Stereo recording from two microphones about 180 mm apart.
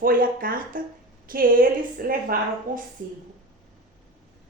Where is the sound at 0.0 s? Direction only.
50° right (ahead or behind).